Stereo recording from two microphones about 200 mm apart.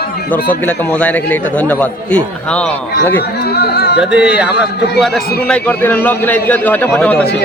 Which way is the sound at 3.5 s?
55° left (ahead or behind).